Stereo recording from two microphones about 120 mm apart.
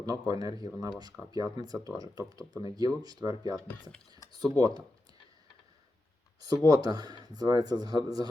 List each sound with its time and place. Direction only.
0.0 s speech: 30° right (ahead or behind)
4.5 s speech: 30° right (ahead or behind)
6.4 s speech: 30° right (ahead or behind)